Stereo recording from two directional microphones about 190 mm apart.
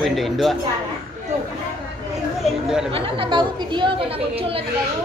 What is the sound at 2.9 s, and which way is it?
A woman's voice, 30° right (ahead or behind).